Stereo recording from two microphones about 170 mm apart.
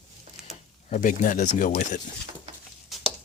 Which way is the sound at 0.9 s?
50° left (ahead or behind).